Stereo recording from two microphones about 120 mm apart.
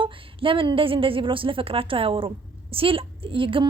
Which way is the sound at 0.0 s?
45° right (ahead or behind).